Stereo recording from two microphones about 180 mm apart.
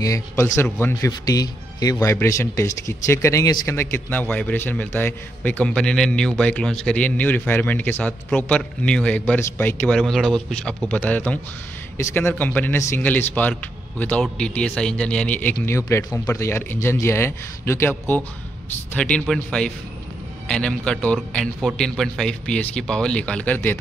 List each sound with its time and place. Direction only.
0.0 s a man's voice: 20° left (ahead or behind)